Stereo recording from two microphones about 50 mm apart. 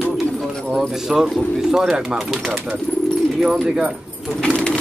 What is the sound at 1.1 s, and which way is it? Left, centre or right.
Speech, centre.